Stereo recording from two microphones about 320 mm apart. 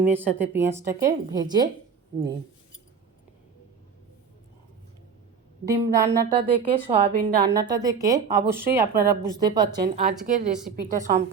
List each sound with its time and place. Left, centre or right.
0.1 s a woman's voice: centre
5.6 s a woman's voice: centre